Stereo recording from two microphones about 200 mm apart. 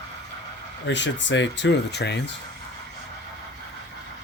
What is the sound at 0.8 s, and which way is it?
Speech, 65° left (ahead or behind).